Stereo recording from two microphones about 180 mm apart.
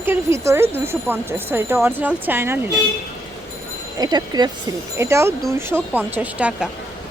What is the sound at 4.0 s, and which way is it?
A woman's voice, 25° right (ahead or behind).